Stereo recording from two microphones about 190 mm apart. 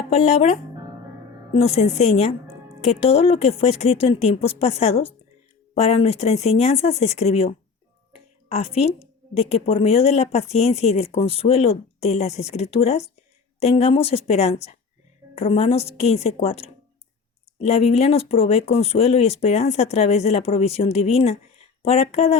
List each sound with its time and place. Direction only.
0.1 s speech: 35° left (ahead or behind)